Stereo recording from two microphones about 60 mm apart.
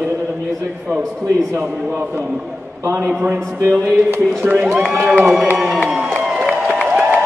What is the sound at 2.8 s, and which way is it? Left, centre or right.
Speech, right.